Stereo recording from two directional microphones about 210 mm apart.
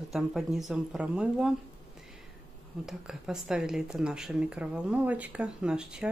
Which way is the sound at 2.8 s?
5° right (ahead or behind).